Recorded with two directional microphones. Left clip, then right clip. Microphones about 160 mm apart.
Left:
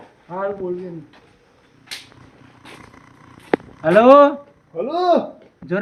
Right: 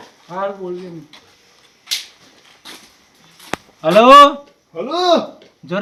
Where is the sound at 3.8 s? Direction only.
20° right (ahead or behind).